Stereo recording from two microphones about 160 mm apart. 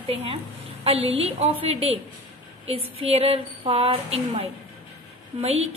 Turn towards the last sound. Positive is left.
turn(degrees=-40)  # may be behind; listen again after turning